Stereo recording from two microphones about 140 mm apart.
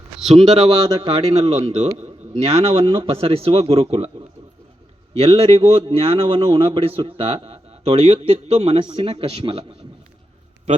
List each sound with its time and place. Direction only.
0.3 s a man's voice: 40° right (ahead or behind)
8.8 s a man's voice: 35° right (ahead or behind)